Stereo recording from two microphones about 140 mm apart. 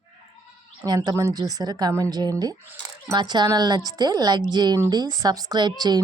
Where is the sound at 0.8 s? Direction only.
30° right (ahead or behind).